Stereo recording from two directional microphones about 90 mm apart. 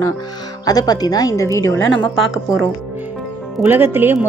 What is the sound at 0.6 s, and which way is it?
A woman's voice, 45° left (ahead or behind).